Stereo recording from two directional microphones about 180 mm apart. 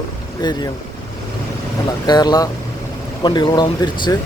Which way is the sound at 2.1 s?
20° left (ahead or behind).